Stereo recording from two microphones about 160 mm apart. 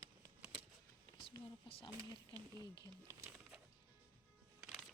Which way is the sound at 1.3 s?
35° left (ahead or behind).